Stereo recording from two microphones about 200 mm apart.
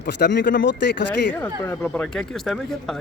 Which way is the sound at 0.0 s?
55° left (ahead or behind).